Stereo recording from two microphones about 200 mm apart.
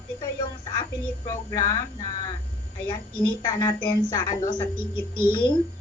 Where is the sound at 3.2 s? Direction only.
20° left (ahead or behind).